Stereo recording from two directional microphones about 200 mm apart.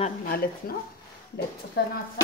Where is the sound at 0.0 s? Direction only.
45° left (ahead or behind).